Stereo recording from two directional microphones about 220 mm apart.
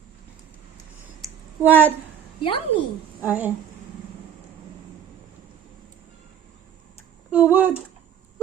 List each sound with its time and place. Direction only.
1.2 s a sound: 10° right (ahead or behind)
2.4 s a woman's voice: 20° left (ahead or behind)
3.2 s speech: 5° right (ahead or behind)
7.3 s speech: 5° right (ahead or behind)